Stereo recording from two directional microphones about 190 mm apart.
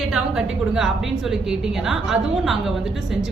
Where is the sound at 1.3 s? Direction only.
5° right (ahead or behind).